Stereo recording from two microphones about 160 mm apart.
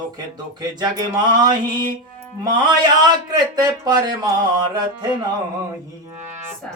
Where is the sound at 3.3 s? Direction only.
25° right (ahead or behind).